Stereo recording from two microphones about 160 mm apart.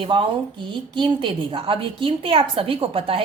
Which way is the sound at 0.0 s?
30° right (ahead or behind).